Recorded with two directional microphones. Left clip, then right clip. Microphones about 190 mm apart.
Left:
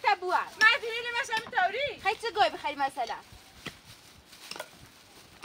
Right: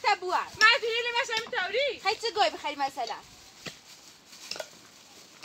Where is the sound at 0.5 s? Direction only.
70° left (ahead or behind).